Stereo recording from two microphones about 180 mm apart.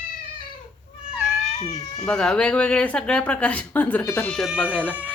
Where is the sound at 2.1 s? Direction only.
5° left (ahead or behind).